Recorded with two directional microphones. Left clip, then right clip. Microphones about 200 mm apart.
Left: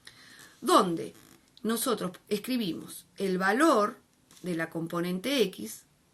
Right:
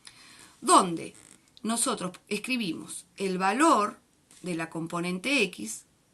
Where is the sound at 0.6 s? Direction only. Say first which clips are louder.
Right 2 dB; 35° right (ahead or behind).